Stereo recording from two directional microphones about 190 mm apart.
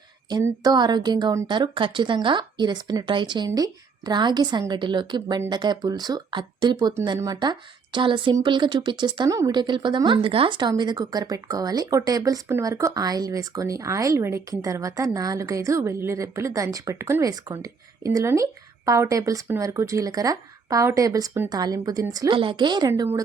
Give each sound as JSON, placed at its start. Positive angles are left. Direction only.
{"t": 0.3, "sound": "speech", "side_deg": -20}